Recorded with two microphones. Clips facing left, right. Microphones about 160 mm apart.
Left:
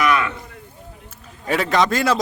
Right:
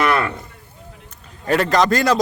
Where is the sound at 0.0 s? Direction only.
35° right (ahead or behind).